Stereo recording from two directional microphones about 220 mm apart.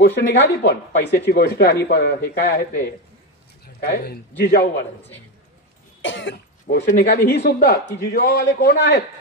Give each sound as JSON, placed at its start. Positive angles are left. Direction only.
{"t": 0.0, "sound": "a man's voice", "side_deg": 45}
{"t": 6.0, "sound": "cough", "side_deg": 55}
{"t": 6.9, "sound": "speech", "side_deg": 45}